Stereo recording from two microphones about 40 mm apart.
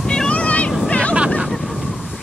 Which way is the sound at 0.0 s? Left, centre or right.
Centre.